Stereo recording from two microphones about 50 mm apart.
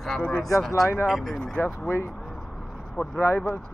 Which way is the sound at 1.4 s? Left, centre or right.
Centre.